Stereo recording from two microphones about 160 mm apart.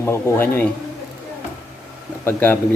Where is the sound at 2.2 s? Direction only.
10° left (ahead or behind).